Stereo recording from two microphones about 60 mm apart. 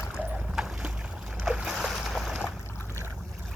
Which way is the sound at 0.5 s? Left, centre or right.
Centre.